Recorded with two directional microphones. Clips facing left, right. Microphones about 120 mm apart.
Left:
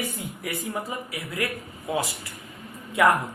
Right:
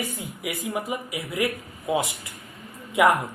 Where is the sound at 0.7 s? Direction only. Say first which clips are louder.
Right 3 dB; 15° right (ahead or behind).